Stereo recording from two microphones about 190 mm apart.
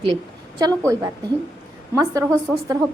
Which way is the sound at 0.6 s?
15° right (ahead or behind).